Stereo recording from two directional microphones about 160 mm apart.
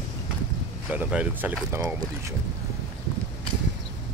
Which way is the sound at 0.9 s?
10° right (ahead or behind).